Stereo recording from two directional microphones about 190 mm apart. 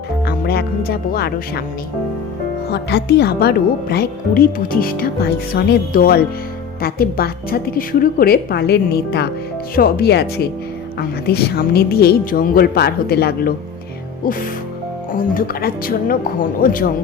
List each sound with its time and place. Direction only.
0.3 s speech: 55° left (ahead or behind)
2.6 s a woman's voice: 60° left (ahead or behind)
15.1 s a woman's voice: 50° left (ahead or behind)